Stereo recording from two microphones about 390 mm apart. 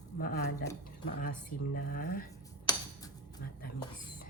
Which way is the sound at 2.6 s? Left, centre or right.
Centre.